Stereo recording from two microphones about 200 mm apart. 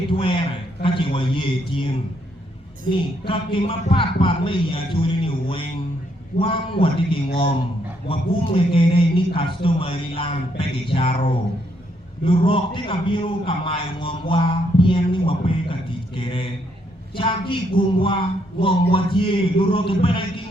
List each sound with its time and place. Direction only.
0.1 s a man's voice: 25° left (ahead or behind)
2.9 s a man's voice: 25° left (ahead or behind)